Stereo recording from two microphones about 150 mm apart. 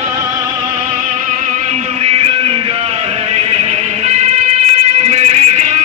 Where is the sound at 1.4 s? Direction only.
45° right (ahead or behind).